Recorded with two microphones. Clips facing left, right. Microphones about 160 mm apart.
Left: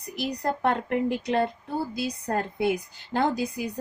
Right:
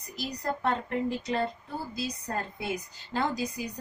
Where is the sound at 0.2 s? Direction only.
65° left (ahead or behind).